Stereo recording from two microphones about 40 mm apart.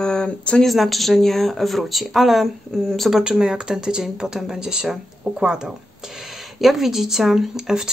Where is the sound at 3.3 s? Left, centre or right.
Centre.